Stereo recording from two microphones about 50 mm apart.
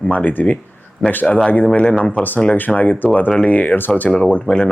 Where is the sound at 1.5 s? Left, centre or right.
Left.